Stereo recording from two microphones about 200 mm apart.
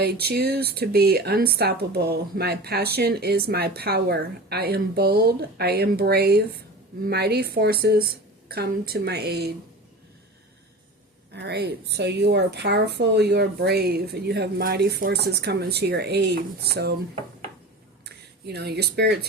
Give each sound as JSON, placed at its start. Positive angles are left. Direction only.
{"t": 0.0, "sound": "speech", "side_deg": -50}
{"t": 11.3, "sound": "speech", "side_deg": -55}
{"t": 18.0, "sound": "speech", "side_deg": -55}